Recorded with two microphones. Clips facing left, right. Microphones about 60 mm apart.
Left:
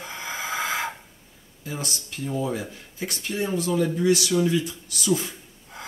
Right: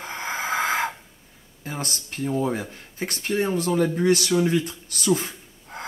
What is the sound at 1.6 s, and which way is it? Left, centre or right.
Speech, right.